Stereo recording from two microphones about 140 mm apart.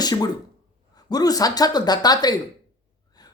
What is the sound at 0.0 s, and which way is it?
Speech, 30° left (ahead or behind).